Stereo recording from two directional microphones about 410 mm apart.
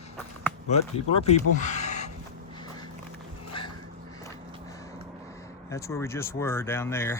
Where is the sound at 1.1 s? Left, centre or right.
Centre.